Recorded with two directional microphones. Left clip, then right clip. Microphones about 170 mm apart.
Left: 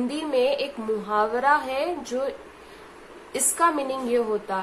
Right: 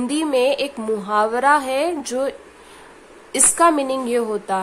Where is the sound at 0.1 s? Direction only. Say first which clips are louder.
Right 6 dB; 65° right (ahead or behind).